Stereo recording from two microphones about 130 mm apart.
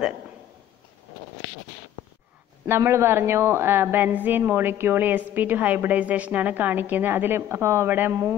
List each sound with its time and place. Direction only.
2.6 s a woman's voice: 20° right (ahead or behind)